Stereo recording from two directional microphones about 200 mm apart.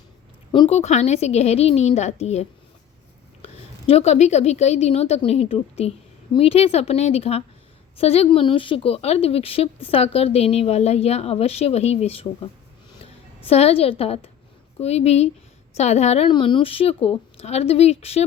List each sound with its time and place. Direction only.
0.5 s a woman's voice: 30° left (ahead or behind)